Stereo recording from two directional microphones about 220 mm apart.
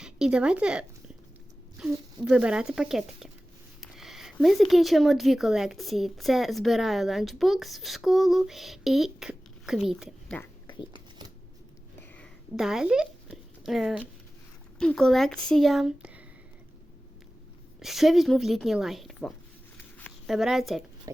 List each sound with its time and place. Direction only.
0.0 s speech: 5° right (ahead or behind)
10.7 s speech: 20° left (ahead or behind)
12.1 s a sound: centre (ahead or behind)
14.8 s speech: 5° left (ahead or behind)
17.7 s speech: centre (ahead or behind)
19.7 s a sound: 5° left (ahead or behind)